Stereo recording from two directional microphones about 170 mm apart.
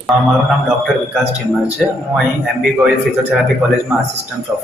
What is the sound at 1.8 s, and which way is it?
Speech, centre (ahead or behind).